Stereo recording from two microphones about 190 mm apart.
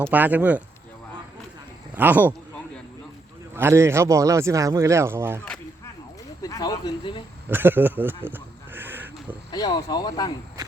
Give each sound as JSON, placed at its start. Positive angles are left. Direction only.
{"t": 0.0, "sound": "speech", "side_deg": -10}
{"t": 2.0, "sound": "speech", "side_deg": -10}
{"t": 3.5, "sound": "speech", "side_deg": -15}
{"t": 6.4, "sound": "speech", "side_deg": 20}
{"t": 7.4, "sound": "a sound", "side_deg": -10}
{"t": 9.5, "sound": "speech", "side_deg": 20}